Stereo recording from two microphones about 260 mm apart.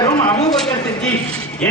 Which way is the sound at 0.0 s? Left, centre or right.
Centre.